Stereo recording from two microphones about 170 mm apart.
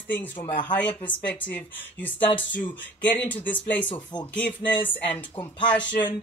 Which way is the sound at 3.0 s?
10° left (ahead or behind).